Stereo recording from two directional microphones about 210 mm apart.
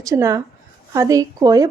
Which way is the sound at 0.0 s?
15° right (ahead or behind).